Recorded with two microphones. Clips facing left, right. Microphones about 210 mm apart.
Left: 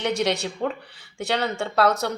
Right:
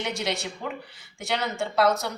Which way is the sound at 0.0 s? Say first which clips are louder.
Left 6 dB; 65° left (ahead or behind).